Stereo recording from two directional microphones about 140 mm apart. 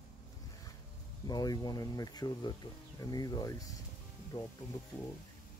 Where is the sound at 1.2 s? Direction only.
30° left (ahead or behind).